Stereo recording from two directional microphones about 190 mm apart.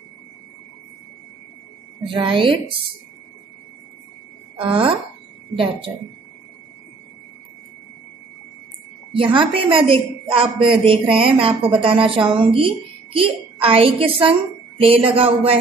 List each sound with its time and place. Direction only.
2.0 s a woman's voice: 25° right (ahead or behind)
4.6 s a woman's voice: 25° right (ahead or behind)
9.1 s a woman's voice: 25° right (ahead or behind)